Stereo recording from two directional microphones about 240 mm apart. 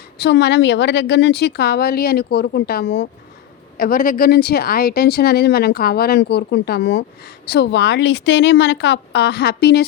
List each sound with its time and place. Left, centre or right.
0.2 s speech: left